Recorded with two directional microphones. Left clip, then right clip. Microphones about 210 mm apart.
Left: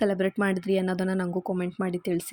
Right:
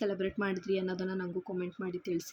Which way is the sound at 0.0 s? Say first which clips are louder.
Left 8 dB; 35° left (ahead or behind).